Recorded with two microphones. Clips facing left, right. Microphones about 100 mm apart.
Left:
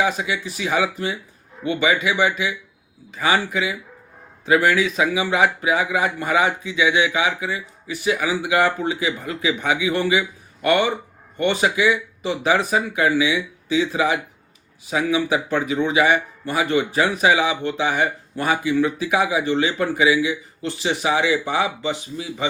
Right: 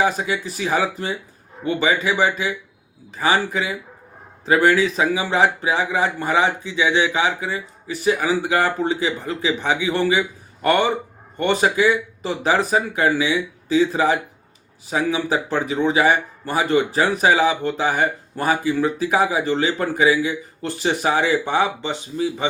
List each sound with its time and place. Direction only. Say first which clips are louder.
0.0 s a man's voice: right 1 dB; 35° right (ahead or behind)